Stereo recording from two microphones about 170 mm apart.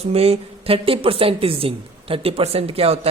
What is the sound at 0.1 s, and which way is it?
A woman's voice, 35° right (ahead or behind).